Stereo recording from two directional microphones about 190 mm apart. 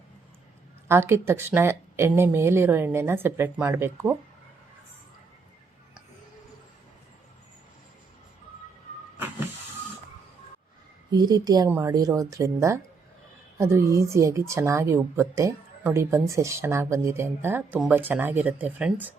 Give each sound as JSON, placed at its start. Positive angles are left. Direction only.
{"t": 0.9, "sound": "a woman's voice", "side_deg": -15}
{"t": 11.1, "sound": "a woman's voice", "side_deg": -20}